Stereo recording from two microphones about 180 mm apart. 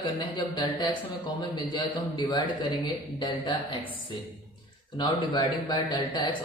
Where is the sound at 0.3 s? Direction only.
25° left (ahead or behind).